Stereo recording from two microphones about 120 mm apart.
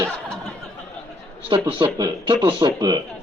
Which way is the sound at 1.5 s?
45° right (ahead or behind).